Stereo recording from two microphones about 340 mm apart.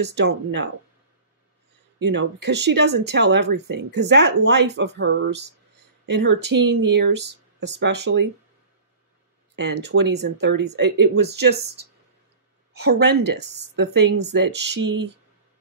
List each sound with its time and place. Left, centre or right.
0.0 s speech: right
2.0 s speech: right
9.6 s speech: right
12.7 s speech: right